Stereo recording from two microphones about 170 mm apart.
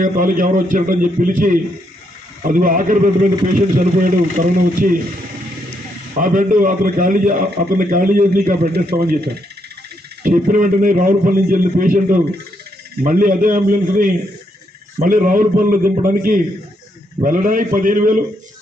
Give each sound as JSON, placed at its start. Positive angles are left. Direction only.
{"t": 0.0, "sound": "a man's voice", "side_deg": -55}
{"t": 6.1, "sound": "a man's voice", "side_deg": -50}
{"t": 10.2, "sound": "a man's voice", "side_deg": -50}